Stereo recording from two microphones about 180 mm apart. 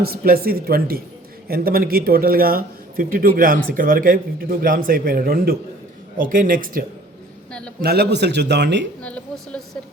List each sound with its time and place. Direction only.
0.0 s speech: 55° right (ahead or behind)
7.9 s a man's voice: 65° right (ahead or behind)
9.0 s a woman's voice: 5° left (ahead or behind)